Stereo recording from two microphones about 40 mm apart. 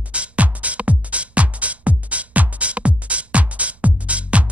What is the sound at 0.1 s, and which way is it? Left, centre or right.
Music, right.